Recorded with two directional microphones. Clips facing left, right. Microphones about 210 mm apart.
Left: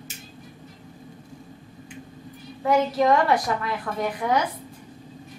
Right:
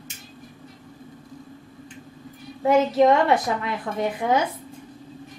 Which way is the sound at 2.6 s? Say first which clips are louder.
Right 3 dB; 25° right (ahead or behind).